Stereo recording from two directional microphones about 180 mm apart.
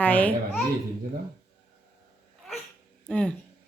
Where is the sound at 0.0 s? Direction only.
5° left (ahead or behind).